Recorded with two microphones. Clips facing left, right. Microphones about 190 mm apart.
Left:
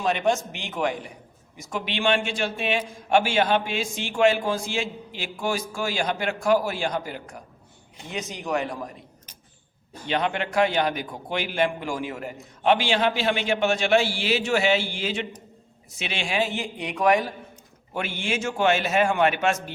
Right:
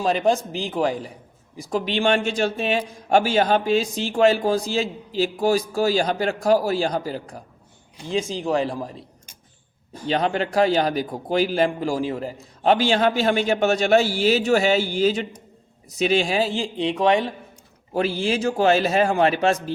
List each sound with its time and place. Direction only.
0.0 s a man's voice: 35° right (ahead or behind)
10.1 s a man's voice: 35° right (ahead or behind)